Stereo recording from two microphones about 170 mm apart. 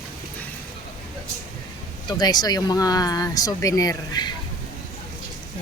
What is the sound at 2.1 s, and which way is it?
Speech, 25° left (ahead or behind).